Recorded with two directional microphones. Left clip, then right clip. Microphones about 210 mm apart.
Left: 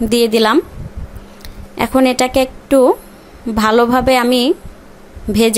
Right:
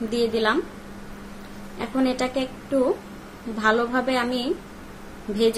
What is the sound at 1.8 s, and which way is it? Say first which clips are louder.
A woman's voice: left 12 dB; 50° left (ahead or behind).